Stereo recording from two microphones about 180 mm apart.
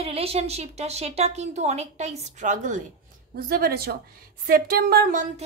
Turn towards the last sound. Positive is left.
turn(degrees=-55)  # may be behind; listen again after turning